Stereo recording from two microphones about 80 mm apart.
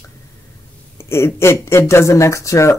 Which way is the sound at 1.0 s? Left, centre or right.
Left.